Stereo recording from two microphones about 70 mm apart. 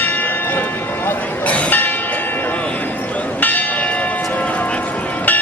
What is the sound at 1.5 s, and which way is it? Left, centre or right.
Church bell, left.